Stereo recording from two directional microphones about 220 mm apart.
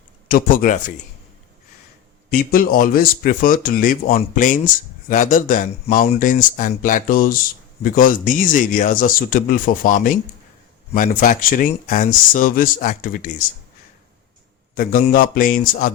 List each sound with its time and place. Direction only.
0.3 s speech: 40° left (ahead or behind)
2.3 s speech: 40° left (ahead or behind)
14.8 s speech: 35° left (ahead or behind)